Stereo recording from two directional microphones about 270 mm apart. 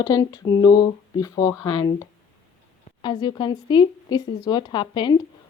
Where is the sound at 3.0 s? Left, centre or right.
Centre.